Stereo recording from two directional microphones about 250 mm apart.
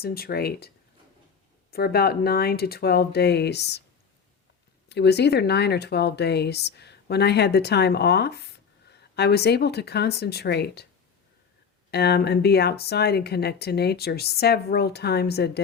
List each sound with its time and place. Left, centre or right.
0.0 s speech: left
1.7 s speech: left
4.9 s speech: left
11.9 s speech: left